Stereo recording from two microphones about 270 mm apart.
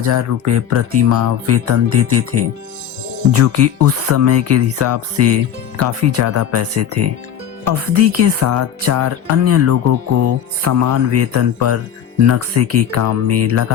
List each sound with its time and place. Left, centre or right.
0.0 s speech: right